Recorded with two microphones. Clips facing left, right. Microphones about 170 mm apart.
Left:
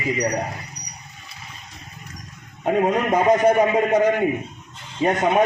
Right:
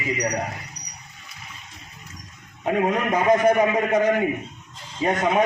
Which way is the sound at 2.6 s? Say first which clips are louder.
Left 3 dB; 30° left (ahead or behind).